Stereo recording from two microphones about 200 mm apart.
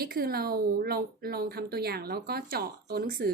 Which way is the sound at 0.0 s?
50° right (ahead or behind).